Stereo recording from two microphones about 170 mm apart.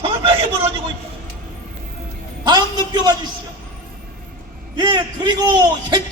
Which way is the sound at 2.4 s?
25° right (ahead or behind).